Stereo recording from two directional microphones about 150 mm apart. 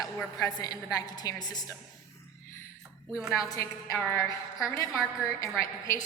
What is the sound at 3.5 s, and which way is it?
A woman's voice, 15° left (ahead or behind).